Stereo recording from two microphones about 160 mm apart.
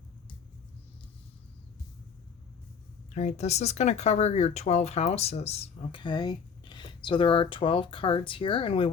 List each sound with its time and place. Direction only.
3.2 s speech: 45° left (ahead or behind)